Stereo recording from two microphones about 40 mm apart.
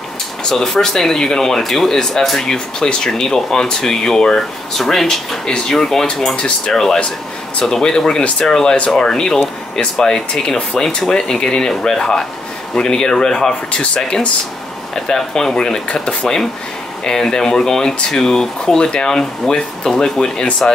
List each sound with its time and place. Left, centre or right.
0.4 s speech: centre